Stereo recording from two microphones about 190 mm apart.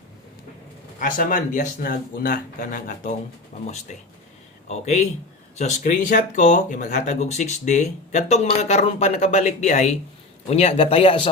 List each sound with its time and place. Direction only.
0.9 s speech: 45° left (ahead or behind)
4.7 s speech: 35° left (ahead or behind)